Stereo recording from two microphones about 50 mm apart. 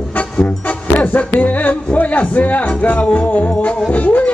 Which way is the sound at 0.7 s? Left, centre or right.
Left.